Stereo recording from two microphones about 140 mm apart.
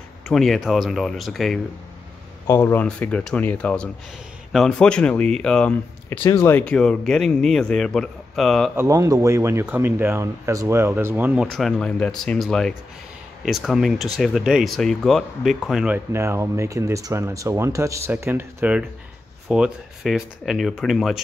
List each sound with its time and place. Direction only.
0.3 s a man's voice: centre (ahead or behind)
2.4 s a man's voice: 15° left (ahead or behind); by 8.7 s centre (ahead or behind)
8.7 s speech: 25° right (ahead or behind)
11.5 s a man's voice: 5° left (ahead or behind)
16.1 s a man's voice: 20° right (ahead or behind); by 21.2 s centre (ahead or behind)